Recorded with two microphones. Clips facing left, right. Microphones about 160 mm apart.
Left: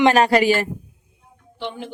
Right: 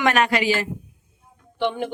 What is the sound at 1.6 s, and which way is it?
Speech, 60° right (ahead or behind).